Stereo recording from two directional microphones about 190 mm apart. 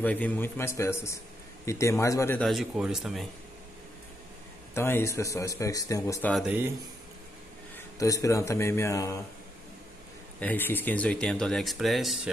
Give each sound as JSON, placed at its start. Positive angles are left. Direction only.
{"t": 0.0, "sound": "speech", "side_deg": 10}
{"t": 2.4, "sound": "speech", "side_deg": 0}
{"t": 4.7, "sound": "speech", "side_deg": 15}
{"t": 6.3, "sound": "speech", "side_deg": -5}
{"t": 7.7, "sound": "speech", "side_deg": 15}
{"t": 10.4, "sound": "speech", "side_deg": 10}